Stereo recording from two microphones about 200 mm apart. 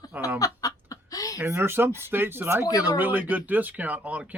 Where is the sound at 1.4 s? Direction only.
10° right (ahead or behind).